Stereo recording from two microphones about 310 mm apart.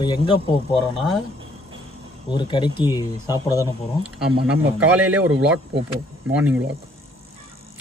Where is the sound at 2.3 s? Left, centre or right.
Centre.